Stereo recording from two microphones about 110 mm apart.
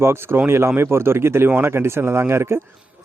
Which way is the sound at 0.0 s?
20° right (ahead or behind).